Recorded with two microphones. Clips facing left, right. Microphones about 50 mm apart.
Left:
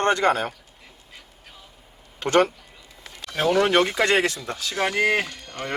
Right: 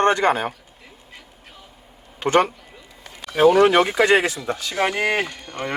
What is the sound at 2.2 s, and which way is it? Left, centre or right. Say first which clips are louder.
Speech: right 1 dB; centre.